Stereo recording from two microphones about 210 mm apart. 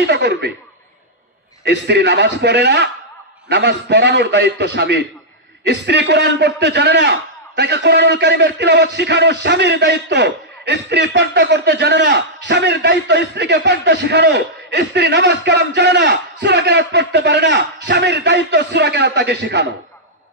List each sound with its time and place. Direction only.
0.0 s a man's voice: 55° right (ahead or behind)
1.6 s a man's voice: 55° right (ahead or behind)